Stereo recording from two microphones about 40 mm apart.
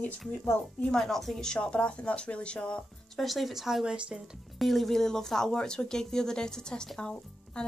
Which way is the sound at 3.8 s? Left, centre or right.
Right.